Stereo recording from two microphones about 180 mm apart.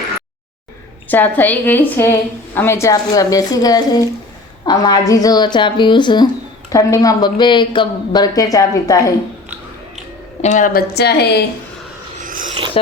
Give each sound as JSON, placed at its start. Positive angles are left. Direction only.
{"t": 1.0, "sound": "a woman's voice", "side_deg": 10}
{"t": 10.4, "sound": "speech", "side_deg": 45}
{"t": 12.2, "sound": "a sound", "side_deg": -45}
{"t": 12.8, "sound": "speech", "side_deg": 30}